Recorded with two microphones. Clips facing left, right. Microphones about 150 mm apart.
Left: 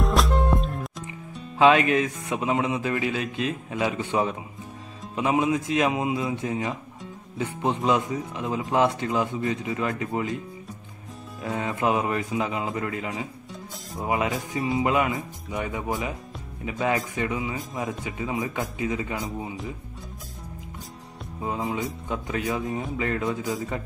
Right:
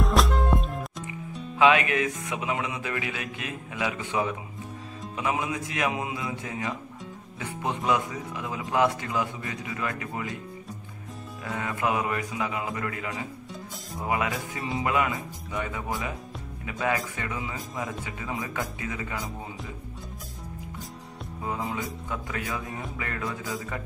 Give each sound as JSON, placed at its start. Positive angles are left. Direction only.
{"t": 0.0, "sound": "music", "side_deg": 0}
{"t": 1.6, "sound": "speech", "side_deg": 35}
{"t": 5.1, "sound": "mantra", "side_deg": 25}
{"t": 11.4, "sound": "mantra", "side_deg": 25}
{"t": 21.4, "sound": "mantra", "side_deg": 20}